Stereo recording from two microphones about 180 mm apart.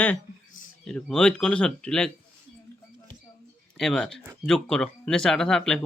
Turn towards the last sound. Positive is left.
turn(degrees=5)  # may be behind; listen again after turning